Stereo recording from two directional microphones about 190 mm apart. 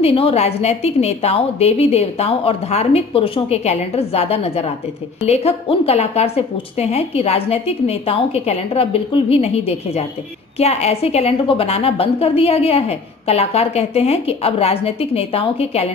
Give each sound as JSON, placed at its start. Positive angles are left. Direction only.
{"t": 0.0, "sound": "a woman's voice", "side_deg": 30}